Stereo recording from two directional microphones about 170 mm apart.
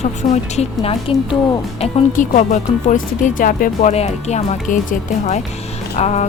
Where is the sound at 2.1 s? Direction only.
45° left (ahead or behind).